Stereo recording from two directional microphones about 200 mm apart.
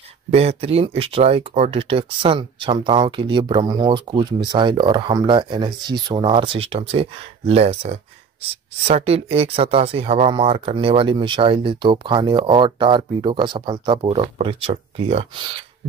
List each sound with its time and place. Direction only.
0.3 s speech: 30° right (ahead or behind)